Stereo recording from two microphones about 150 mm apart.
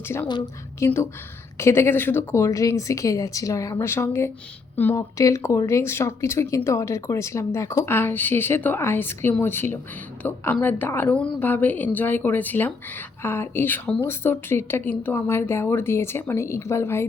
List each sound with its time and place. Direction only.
0.8 s speech: 15° left (ahead or behind)